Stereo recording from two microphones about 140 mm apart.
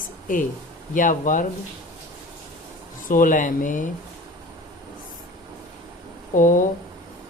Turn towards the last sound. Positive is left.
turn(degrees=70)  # may be behind; listen again after turning